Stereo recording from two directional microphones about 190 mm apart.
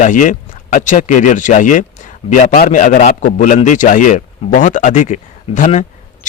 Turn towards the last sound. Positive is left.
turn(degrees=40)  # may be behind; listen again after turning